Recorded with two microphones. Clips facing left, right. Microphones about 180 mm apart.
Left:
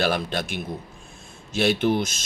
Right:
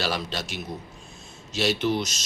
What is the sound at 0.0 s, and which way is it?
A man's voice, 55° left (ahead or behind).